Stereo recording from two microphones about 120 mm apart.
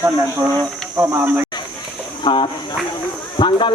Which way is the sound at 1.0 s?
20° right (ahead or behind).